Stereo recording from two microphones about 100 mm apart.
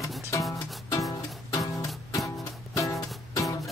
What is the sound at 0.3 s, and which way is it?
Music, 30° left (ahead or behind).